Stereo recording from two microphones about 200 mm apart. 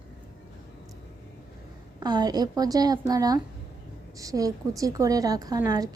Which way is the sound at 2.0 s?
20° right (ahead or behind).